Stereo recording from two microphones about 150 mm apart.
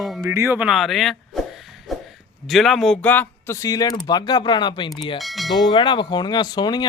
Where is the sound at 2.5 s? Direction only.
Centre (ahead or behind); by 4.9 s 30° left (ahead or behind).